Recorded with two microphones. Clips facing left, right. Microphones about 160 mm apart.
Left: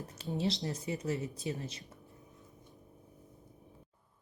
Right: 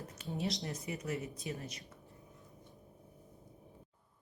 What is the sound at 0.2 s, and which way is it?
Speech, 30° left (ahead or behind).